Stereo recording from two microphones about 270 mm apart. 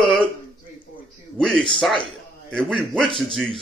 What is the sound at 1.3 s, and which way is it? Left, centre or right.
Speech, centre.